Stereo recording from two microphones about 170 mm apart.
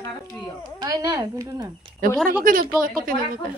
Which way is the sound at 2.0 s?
55° right (ahead or behind).